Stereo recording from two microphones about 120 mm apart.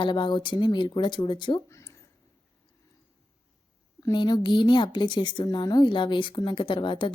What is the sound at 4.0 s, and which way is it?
Speech, 35° left (ahead or behind).